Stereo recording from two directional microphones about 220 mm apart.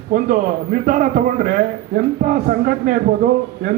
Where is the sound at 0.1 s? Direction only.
40° right (ahead or behind).